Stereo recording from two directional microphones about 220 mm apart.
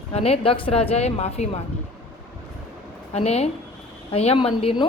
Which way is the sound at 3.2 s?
30° left (ahead or behind).